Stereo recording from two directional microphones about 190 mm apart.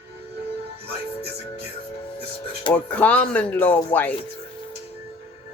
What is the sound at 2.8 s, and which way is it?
Speech, 5° left (ahead or behind).